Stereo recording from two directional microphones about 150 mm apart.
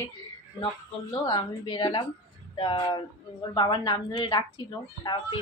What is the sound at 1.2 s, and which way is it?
A woman's voice, 30° left (ahead or behind).